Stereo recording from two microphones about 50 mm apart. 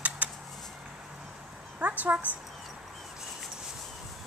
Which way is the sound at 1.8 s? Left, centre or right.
Right.